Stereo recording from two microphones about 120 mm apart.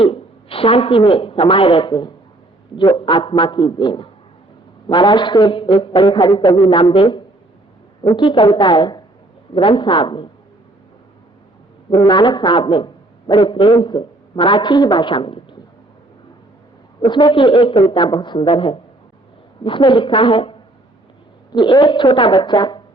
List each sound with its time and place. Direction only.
0.0 s a woman's voice: 50° left (ahead or behind)
6.1 s a woman's voice: 30° left (ahead or behind)
6.6 s a man's voice: 45° left (ahead or behind)
11.9 s a man's voice: 45° left (ahead or behind)
17.0 s a man's voice: 40° left (ahead or behind)